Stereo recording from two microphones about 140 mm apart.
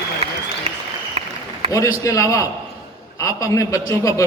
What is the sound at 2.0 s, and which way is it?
A man's voice, 20° left (ahead or behind).